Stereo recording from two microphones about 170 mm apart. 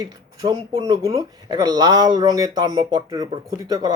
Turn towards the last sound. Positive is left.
turn(degrees=-20)  # may be behind; listen again after turning